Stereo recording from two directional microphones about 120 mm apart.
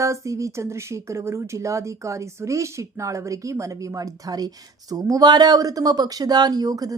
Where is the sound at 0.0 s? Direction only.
25° right (ahead or behind).